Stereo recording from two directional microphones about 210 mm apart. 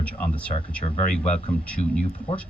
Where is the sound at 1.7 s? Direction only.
5° left (ahead or behind).